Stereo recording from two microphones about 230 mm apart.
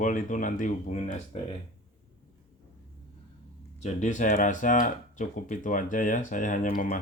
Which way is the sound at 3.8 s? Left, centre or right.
Left.